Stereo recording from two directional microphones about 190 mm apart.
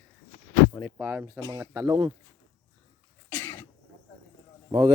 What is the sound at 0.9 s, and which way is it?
A man's voice, 15° right (ahead or behind).